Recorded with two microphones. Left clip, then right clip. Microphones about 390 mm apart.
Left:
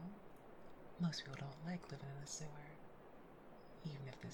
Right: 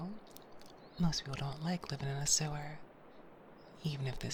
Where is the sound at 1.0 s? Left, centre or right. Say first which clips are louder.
Right 9 dB; centre.